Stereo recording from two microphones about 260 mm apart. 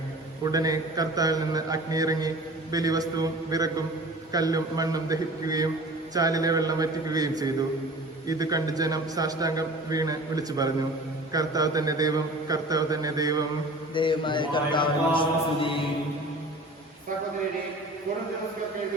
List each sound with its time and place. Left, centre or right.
0.4 s a man's voice: centre
13.9 s a man's voice: centre